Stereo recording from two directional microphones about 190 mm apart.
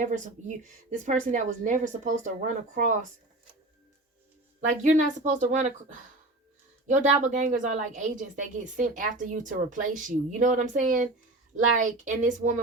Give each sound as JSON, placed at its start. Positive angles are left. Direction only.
{"t": 0.0, "sound": "a woman's voice", "side_deg": -40}
{"t": 4.8, "sound": "a woman's voice", "side_deg": -40}